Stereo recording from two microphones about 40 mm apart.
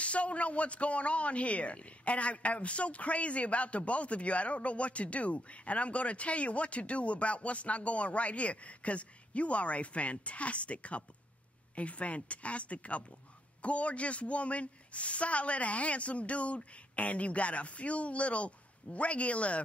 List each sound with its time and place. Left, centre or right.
0.0 s speech: left